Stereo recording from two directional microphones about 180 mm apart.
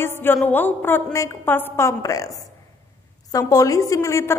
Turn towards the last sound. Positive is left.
turn(degrees=15)  # may be behind; listen again after turning